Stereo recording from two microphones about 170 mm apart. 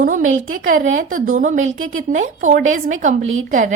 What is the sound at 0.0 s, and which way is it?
A woman's voice, 50° right (ahead or behind).